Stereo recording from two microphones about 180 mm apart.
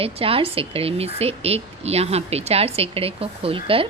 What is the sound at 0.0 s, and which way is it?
A woman's voice, 30° right (ahead or behind).